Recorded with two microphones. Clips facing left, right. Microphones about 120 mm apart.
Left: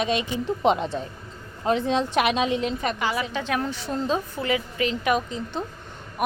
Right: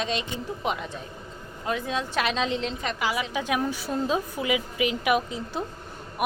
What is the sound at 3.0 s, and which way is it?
A woman's voice, 5° right (ahead or behind).